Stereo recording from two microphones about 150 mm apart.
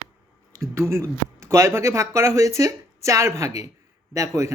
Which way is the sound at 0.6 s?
20° right (ahead or behind).